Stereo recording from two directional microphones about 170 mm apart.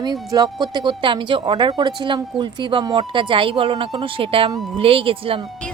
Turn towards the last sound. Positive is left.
turn(degrees=-30)  # may be behind; listen again after turning